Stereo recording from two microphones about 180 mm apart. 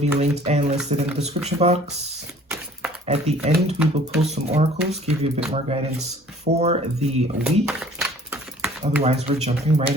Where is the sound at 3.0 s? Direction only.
35° right (ahead or behind).